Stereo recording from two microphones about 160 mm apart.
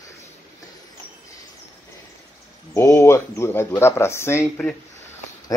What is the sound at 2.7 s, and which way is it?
Speech, 20° left (ahead or behind).